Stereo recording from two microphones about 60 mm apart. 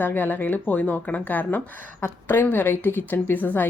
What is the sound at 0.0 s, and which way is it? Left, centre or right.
Speech, left.